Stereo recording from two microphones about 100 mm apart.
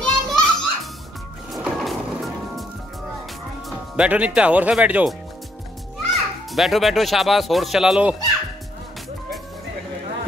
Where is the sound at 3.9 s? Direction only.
15° right (ahead or behind).